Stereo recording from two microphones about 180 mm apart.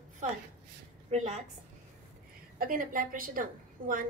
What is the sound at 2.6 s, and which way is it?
A woman's voice, 50° right (ahead or behind).